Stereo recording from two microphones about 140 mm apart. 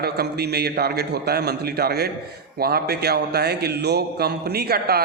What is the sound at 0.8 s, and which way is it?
A man's voice, 90° right.